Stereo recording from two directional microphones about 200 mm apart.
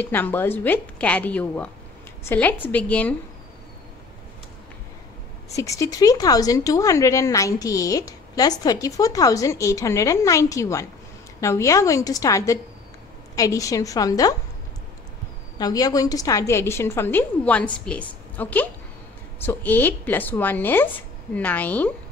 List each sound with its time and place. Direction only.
0.0 s a woman's voice: 10° left (ahead or behind)
5.6 s a woman's voice: 15° left (ahead or behind)
15.6 s a woman's voice: 20° left (ahead or behind)